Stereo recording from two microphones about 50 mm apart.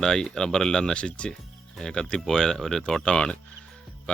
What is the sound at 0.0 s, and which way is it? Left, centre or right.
Speech, centre.